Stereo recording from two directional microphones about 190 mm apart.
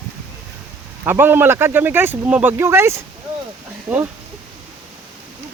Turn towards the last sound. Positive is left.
turn(degrees=-10)  # may be behind; listen again after turning